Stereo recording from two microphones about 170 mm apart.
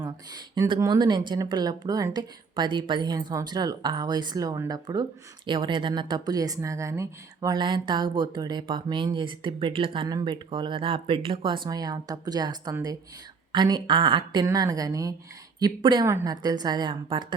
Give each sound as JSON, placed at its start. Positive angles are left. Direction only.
{"t": 0.0, "sound": "speech", "side_deg": -25}